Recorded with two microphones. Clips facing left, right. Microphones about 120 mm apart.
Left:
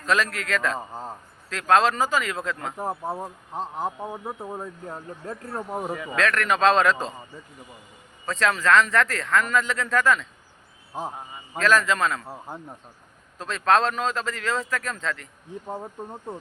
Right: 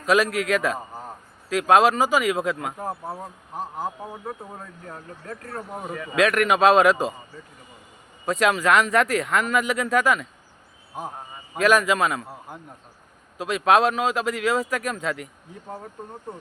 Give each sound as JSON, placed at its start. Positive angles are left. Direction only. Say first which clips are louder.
{"t": 0.0, "sound": "speech", "louder": "right 4 dB", "side_deg": -10}
{"t": 2.7, "sound": "speech", "louder": "left 2 dB", "side_deg": 25}
{"t": 6.1, "sound": "speech", "louder": "right 4 dB", "side_deg": -15}
{"t": 8.3, "sound": "speech", "louder": "right 1 dB", "side_deg": -15}
{"t": 10.9, "sound": "speech", "louder": "left 2 dB", "side_deg": 30}
{"t": 11.5, "sound": "speech", "louder": "right 2 dB", "side_deg": -15}
{"t": 13.4, "sound": "speech", "louder": "right 2 dB", "side_deg": -10}
{"t": 15.6, "sound": "speech", "louder": "left 3 dB", "side_deg": 20}